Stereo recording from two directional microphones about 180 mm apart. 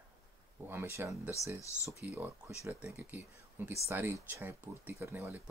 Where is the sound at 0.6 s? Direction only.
15° right (ahead or behind).